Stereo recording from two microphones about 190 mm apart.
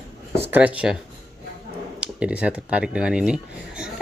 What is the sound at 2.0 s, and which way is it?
Speech, 5° right (ahead or behind).